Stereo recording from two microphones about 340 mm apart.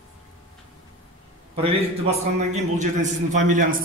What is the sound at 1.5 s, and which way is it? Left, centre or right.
A man's voice, centre.